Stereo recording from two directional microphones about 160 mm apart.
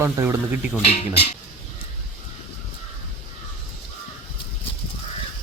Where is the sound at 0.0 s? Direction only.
15° right (ahead or behind).